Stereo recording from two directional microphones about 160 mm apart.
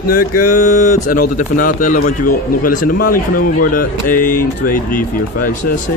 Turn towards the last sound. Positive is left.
turn(degrees=60)  # may be behind; listen again after turning